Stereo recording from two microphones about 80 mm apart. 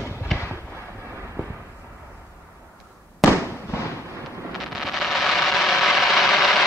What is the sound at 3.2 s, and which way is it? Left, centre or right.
Fireworks, left.